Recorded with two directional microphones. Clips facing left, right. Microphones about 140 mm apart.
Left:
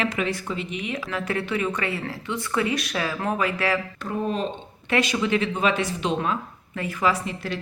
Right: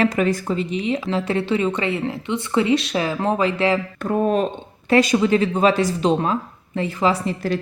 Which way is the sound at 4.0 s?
50° right (ahead or behind).